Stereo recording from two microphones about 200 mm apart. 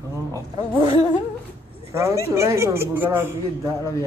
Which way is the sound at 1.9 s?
15° right (ahead or behind).